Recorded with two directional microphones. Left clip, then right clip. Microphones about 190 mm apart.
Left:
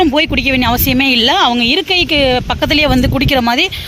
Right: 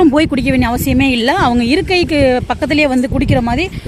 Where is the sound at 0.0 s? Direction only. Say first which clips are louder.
Even; 35° right (ahead or behind); by 3.8 s 10° right (ahead or behind).